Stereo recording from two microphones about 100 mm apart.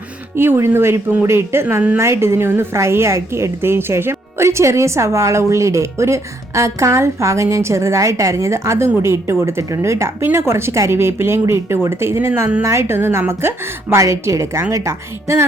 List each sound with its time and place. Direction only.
0.3 s a woman's voice: 25° right (ahead or behind)